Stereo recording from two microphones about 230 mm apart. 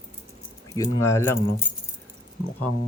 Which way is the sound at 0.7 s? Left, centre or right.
Centre.